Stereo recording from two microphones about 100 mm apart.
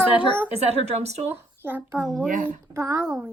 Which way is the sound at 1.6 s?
25° right (ahead or behind).